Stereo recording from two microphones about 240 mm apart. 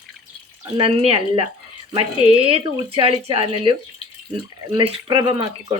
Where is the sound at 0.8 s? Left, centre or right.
Right.